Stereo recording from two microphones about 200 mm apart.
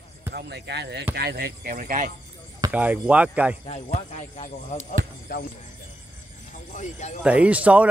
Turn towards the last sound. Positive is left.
turn(degrees=-5)  # may be behind; listen again after turning